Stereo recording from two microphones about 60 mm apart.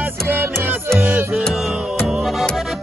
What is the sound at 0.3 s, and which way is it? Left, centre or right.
Music, right.